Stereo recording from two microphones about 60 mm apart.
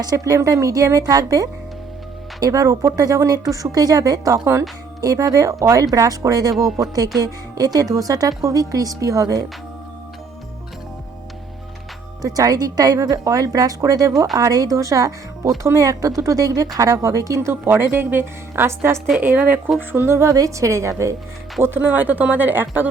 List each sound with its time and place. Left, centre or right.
0.0 s speech: right
0.3 s speech: right
8.4 s speech: right
12.2 s a woman's voice: right
17.5 s a woman's voice: right
19.2 s a woman's voice: right
19.9 s speech: right
20.3 s a woman's voice: right
21.8 s a woman's voice: right